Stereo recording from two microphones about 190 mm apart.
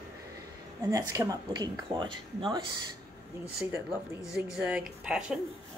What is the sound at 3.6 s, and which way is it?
Speech, 10° right (ahead or behind).